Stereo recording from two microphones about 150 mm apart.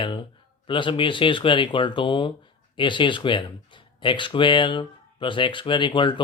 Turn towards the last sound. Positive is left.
turn(degrees=30)  # may be behind; listen again after turning